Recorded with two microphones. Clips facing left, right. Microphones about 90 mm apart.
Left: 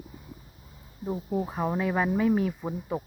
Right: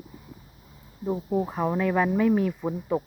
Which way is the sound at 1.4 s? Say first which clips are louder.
Right 3 dB; centre (ahead or behind).